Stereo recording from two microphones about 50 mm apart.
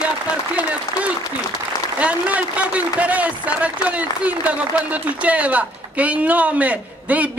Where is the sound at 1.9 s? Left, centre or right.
Right.